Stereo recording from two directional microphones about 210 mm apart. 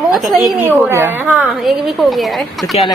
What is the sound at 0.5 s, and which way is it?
Speech, 10° right (ahead or behind).